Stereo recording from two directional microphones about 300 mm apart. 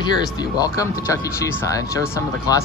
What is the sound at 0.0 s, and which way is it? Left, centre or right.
Speech, centre.